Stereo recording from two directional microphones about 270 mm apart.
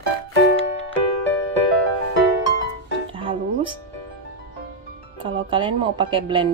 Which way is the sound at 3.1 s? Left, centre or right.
Centre.